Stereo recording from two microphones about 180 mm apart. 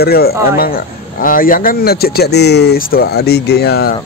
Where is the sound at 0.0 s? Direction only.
60° left (ahead or behind).